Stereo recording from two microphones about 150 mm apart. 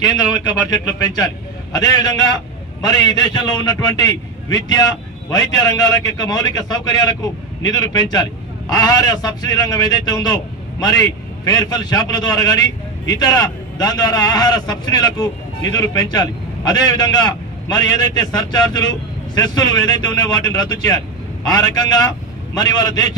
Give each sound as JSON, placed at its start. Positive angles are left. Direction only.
{"t": 0.3, "sound": "a man's voice", "side_deg": 25}